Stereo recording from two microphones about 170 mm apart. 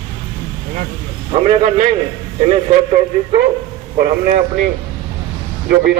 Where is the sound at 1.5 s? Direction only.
40° right (ahead or behind).